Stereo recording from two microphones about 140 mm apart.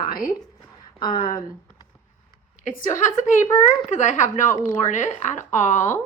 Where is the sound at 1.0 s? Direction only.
35° left (ahead or behind).